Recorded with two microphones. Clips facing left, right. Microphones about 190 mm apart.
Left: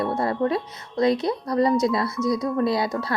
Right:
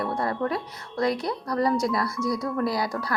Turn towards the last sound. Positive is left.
turn(degrees=25)  # may be behind; listen again after turning